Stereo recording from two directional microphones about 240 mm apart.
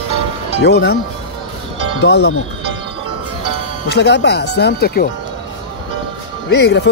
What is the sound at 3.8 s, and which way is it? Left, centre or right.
Speech, left.